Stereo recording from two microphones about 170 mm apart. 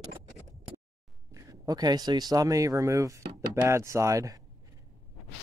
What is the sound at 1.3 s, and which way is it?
Speech, 20° right (ahead or behind).